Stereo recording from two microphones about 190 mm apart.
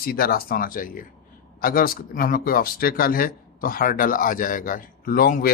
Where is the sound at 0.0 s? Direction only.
50° left (ahead or behind).